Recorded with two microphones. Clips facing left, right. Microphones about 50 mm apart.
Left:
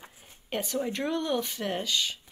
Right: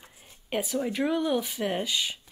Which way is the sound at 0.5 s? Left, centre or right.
Centre.